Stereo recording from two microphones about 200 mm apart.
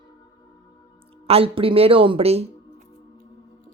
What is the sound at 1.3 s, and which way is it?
Speech, 30° right (ahead or behind).